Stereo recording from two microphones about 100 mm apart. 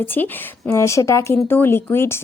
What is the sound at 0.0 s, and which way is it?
Speech, 20° left (ahead or behind).